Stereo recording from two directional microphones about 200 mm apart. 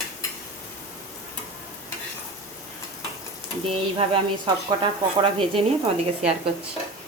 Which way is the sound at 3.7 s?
25° right (ahead or behind).